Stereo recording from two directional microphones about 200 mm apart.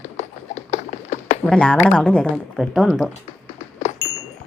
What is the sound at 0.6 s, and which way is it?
Clip-clop, 35° left (ahead or behind).